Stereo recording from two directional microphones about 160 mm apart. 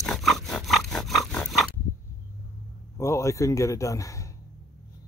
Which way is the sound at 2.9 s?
20° left (ahead or behind).